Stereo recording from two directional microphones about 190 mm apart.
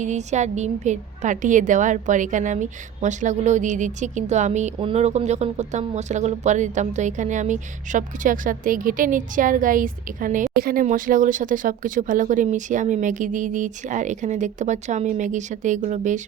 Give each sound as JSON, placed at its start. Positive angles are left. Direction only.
{"t": 0.0, "sound": "a woman's voice", "side_deg": -40}